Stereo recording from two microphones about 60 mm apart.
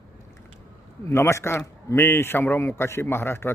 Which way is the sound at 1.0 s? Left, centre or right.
Left.